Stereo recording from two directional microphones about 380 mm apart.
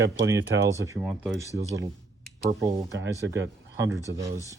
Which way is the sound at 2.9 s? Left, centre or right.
Right.